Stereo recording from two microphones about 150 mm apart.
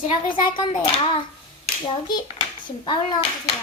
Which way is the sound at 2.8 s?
30° left (ahead or behind).